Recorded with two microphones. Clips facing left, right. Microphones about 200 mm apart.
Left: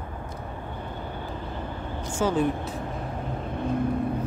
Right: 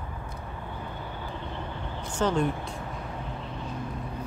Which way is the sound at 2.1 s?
5° left (ahead or behind).